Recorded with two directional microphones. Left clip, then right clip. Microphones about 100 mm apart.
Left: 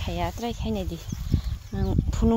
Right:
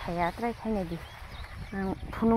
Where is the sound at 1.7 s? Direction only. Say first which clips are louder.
Left 3 dB; 80° left.